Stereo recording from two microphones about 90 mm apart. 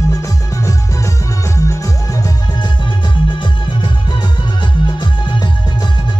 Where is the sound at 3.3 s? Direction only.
60° left (ahead or behind).